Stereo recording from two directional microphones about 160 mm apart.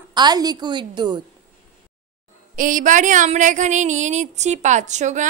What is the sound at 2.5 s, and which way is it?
Speech, 55° right (ahead or behind).